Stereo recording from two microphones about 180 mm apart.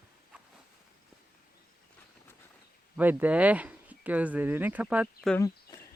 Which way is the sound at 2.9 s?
10° right (ahead or behind).